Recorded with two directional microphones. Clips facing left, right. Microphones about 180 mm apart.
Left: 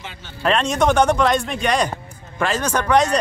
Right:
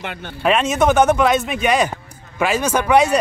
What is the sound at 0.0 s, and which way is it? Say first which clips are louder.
Speech: right 8 dB; 60° right (ahead or behind).